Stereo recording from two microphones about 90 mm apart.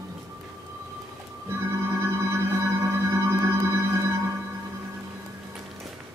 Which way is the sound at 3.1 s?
30° right (ahead or behind).